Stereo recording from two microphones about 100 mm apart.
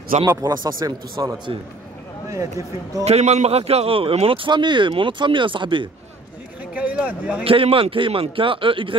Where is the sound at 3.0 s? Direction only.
90° right; by 5.9 s 55° right (ahead or behind).